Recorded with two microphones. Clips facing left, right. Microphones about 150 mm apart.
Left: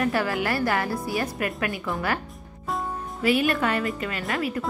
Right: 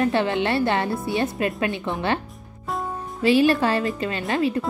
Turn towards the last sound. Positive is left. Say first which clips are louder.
# right 5 dB
turn(degrees=-25)  # may be behind; listen again after turning